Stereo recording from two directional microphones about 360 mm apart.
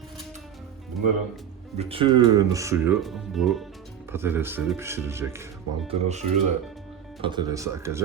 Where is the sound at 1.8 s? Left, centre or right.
Centre.